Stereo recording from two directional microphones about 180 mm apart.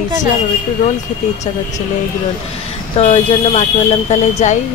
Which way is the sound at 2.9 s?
35° left (ahead or behind).